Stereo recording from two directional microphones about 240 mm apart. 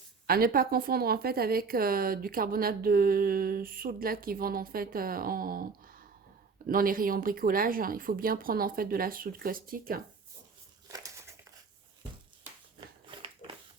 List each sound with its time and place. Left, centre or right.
0.3 s speech: right